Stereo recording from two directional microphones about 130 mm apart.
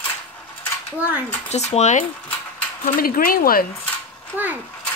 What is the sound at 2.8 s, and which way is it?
Speech, 90° left.